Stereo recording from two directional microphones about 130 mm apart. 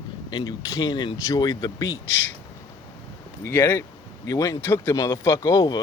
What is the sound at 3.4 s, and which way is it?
Speech, 15° left (ahead or behind).